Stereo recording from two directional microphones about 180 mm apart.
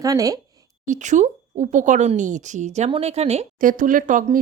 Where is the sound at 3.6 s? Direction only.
50° right (ahead or behind).